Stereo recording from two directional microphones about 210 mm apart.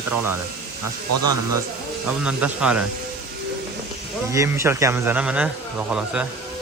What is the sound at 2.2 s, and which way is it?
Speech, 5° right (ahead or behind).